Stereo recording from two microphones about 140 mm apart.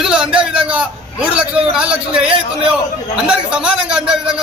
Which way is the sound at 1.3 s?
5° right (ahead or behind).